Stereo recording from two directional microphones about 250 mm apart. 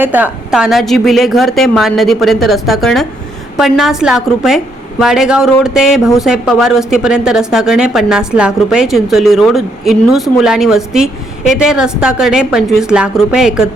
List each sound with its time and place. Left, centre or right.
0.0 s a woman's voice: centre